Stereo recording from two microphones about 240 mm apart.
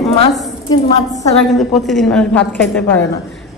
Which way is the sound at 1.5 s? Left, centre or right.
Centre.